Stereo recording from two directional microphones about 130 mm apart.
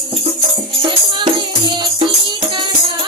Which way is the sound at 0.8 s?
40° right (ahead or behind).